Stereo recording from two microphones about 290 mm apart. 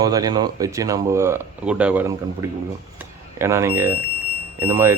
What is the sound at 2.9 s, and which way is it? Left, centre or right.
Smoke detector, centre.